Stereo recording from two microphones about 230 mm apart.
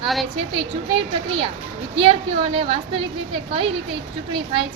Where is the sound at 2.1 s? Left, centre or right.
Right.